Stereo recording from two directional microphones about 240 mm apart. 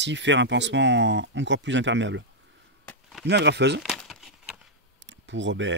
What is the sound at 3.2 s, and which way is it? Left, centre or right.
Speech, right.